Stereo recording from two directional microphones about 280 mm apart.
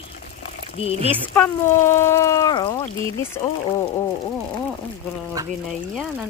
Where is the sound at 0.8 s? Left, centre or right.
Left.